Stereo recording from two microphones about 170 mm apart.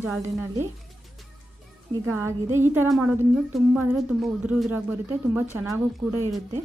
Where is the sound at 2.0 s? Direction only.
15° right (ahead or behind).